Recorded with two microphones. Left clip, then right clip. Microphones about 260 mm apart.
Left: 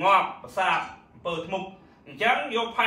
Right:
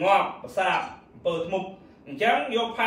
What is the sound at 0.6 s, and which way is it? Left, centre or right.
Speech, centre.